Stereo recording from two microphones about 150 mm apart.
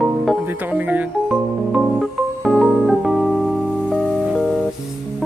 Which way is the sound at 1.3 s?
Centre (ahead or behind).